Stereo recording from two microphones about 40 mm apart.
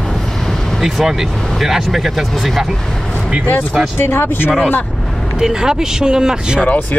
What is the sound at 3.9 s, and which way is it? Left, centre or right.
Speech, left.